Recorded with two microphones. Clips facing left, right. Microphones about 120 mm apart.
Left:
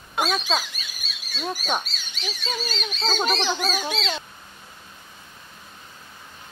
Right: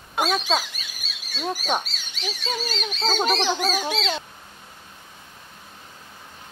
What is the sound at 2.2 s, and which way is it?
Speech, 55° right (ahead or behind).